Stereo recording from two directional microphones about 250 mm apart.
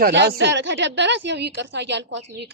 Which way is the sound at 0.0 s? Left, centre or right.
Right.